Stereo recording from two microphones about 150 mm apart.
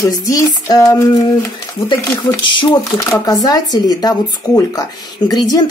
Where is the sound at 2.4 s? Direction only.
30° left (ahead or behind).